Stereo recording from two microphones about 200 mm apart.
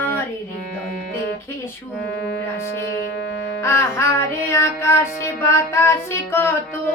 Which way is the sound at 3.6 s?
15° left (ahead or behind).